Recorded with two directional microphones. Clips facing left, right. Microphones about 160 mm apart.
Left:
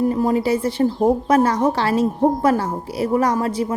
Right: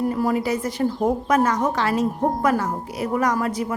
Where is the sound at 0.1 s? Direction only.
25° left (ahead or behind).